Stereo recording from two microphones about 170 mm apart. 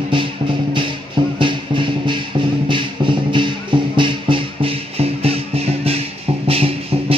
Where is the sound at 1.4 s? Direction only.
30° right (ahead or behind).